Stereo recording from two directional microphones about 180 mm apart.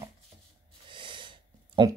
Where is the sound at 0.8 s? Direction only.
25° right (ahead or behind).